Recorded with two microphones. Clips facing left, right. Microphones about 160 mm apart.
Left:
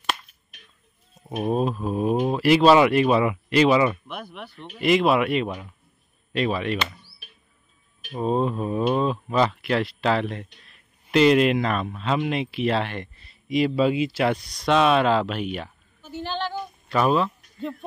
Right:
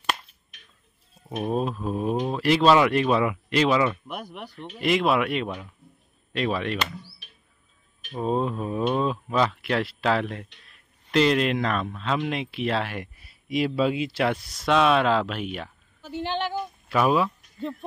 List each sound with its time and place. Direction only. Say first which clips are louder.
1.5 s speech: left 3 dB; 5° left (ahead or behind)
4.1 s speech: even; 40° right (ahead or behind)
4.6 s speech: left 3 dB; centre (ahead or behind)
8.1 s speech: left 2 dB; centre (ahead or behind)
16.2 s a sound: right 1 dB; 20° right (ahead or behind)
16.9 s speech: left 1 dB; 5° right (ahead or behind)